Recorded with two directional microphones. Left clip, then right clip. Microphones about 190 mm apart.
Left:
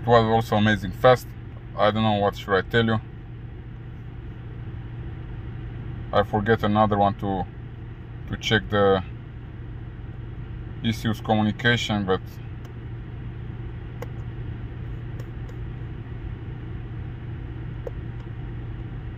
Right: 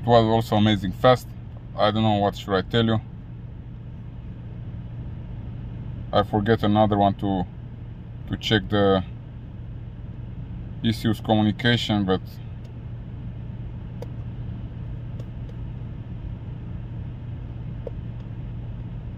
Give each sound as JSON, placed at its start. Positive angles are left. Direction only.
{"t": 0.0, "sound": "speech", "side_deg": -20}
{"t": 6.0, "sound": "speech", "side_deg": -20}
{"t": 10.8, "sound": "speech", "side_deg": -15}